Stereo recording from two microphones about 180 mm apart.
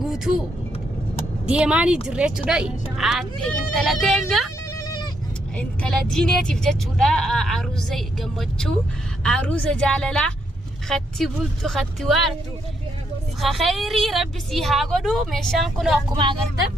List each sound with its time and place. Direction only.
1.5 s speech: 5° right (ahead or behind)
4.7 s sheep: 20° left (ahead or behind)
5.5 s speech: 5° left (ahead or behind)
13.4 s speech: centre (ahead or behind)
16.1 s speech: 25° right (ahead or behind)